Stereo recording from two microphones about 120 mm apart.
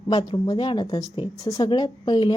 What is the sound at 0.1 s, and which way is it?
Speech, 35° left (ahead or behind).